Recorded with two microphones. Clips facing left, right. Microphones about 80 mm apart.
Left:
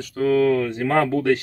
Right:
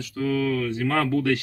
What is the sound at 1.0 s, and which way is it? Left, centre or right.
Speech, left.